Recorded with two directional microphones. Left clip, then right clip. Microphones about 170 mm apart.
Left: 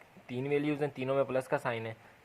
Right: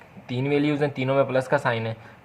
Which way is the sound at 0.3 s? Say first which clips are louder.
Right 9 dB; 40° left (ahead or behind).